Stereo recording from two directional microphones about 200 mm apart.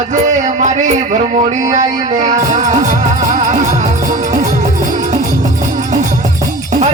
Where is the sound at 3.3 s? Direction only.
40° right (ahead or behind).